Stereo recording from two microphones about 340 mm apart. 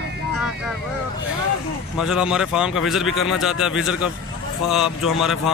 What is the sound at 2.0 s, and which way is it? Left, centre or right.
A man's voice, centre.